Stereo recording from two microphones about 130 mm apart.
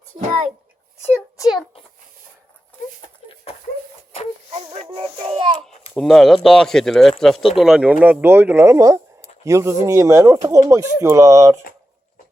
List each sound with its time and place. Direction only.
4.5 s music: 65° right (ahead or behind)
4.9 s a child's voice: 45° right (ahead or behind)
5.9 s speech: 5° left (ahead or behind); by 11.5 s 25° right (ahead or behind)